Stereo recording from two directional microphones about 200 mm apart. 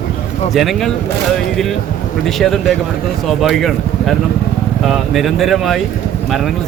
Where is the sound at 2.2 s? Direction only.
Centre (ahead or behind).